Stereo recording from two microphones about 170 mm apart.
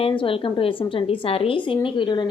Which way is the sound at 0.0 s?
30° left (ahead or behind).